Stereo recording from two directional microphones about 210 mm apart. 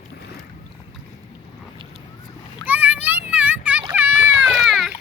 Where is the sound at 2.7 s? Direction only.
10° right (ahead or behind).